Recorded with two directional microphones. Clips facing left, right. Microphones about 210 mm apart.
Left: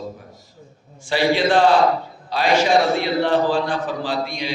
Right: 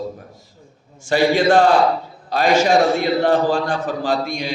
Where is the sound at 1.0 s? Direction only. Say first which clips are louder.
Right 3 dB; 45° right (ahead or behind).